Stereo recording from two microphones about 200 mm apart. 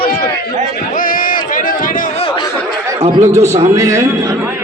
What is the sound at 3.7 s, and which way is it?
Speech, 15° right (ahead or behind).